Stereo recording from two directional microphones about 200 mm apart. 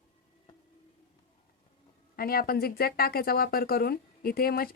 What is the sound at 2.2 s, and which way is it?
A woman's voice, 50° left (ahead or behind).